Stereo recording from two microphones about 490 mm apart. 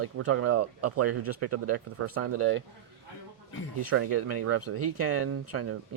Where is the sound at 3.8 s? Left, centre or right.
Right.